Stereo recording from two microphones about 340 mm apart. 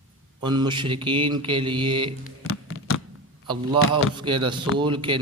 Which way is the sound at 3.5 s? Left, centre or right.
Centre.